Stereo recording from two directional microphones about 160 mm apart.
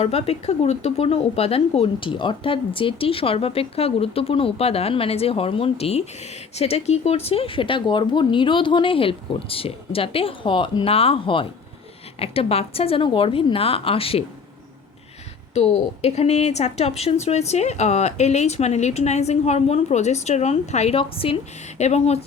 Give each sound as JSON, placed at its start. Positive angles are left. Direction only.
{"t": 0.0, "sound": "speech", "side_deg": 40}
{"t": 15.5, "sound": "a woman's voice", "side_deg": 40}